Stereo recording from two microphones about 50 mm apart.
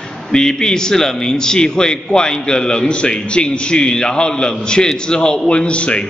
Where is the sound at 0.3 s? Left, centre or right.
Centre.